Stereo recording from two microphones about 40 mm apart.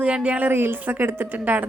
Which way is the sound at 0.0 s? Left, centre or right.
Right.